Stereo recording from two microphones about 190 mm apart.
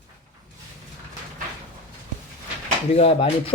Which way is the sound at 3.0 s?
30° left (ahead or behind).